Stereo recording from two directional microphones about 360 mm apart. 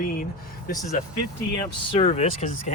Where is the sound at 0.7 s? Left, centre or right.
Centre.